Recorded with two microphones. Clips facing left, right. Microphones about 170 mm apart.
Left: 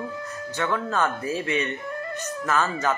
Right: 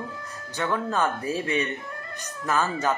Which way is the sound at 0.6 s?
15° right (ahead or behind).